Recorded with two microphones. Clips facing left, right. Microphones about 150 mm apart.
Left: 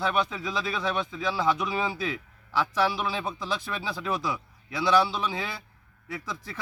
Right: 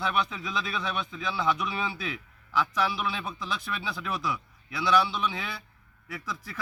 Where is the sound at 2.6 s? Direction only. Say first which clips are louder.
Left 2 dB; 35° left (ahead or behind).